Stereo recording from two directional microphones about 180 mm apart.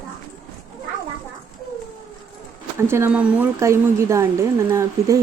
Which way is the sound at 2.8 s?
15° right (ahead or behind).